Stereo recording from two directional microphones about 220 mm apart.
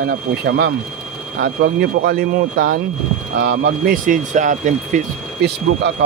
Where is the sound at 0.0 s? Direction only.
45° right (ahead or behind).